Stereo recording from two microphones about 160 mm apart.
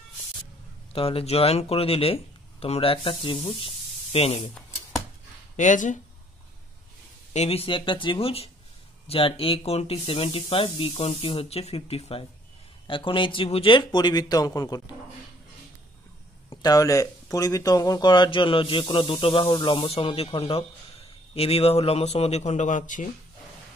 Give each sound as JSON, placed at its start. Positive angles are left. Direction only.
{"t": 0.9, "sound": "speech", "side_deg": 35}
{"t": 5.6, "sound": "speech", "side_deg": 50}
{"t": 7.3, "sound": "speech", "side_deg": 40}
{"t": 16.4, "sound": "speech", "side_deg": 25}